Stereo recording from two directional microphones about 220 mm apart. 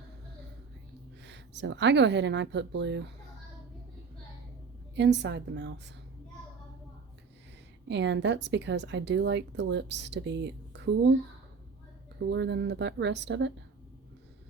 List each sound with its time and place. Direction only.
1.2 s a woman's voice: 50° right (ahead or behind)
4.9 s a woman's voice: 50° right (ahead or behind)
7.9 s a woman's voice: 55° right (ahead or behind)
12.3 s a woman's voice: 50° right (ahead or behind)